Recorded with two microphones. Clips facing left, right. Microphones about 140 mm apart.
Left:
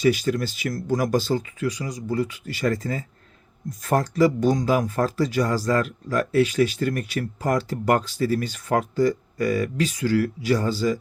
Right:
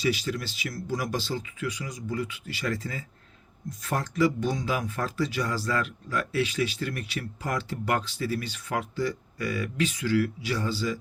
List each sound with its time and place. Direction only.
0.0 s speech: 50° left (ahead or behind)